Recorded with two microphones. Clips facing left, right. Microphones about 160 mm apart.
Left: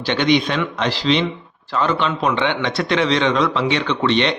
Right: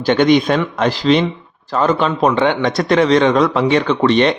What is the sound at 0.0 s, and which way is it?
A man's voice, 45° right (ahead or behind).